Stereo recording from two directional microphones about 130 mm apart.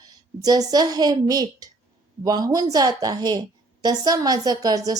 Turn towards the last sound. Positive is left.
turn(degrees=-30)  # may be behind; listen again after turning